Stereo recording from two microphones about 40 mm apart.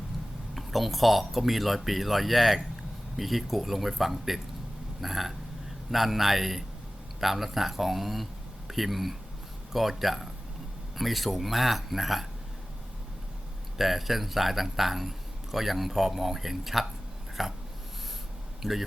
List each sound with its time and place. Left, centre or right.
0.5 s speech: centre
13.7 s speech: centre
17.4 s dog: centre
18.6 s speech: centre